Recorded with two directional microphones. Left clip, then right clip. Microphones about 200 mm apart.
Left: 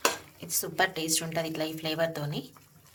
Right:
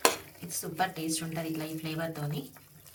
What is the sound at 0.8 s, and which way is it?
A woman's voice, 60° left (ahead or behind).